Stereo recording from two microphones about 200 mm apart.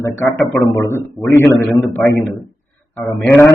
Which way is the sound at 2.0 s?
5° left (ahead or behind).